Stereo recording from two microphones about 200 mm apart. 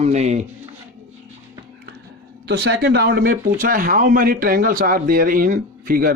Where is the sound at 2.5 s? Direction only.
55° right (ahead or behind).